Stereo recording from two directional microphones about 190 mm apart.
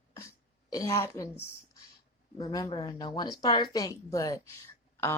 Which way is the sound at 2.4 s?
20° left (ahead or behind).